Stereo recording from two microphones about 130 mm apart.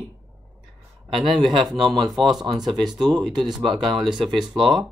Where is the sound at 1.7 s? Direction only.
30° right (ahead or behind).